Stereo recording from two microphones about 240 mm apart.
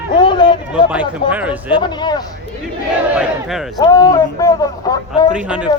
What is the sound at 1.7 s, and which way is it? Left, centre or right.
Speech, centre.